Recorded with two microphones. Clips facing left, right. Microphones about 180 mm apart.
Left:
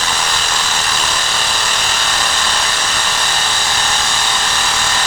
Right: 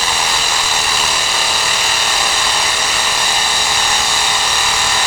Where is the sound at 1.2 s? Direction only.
10° right (ahead or behind).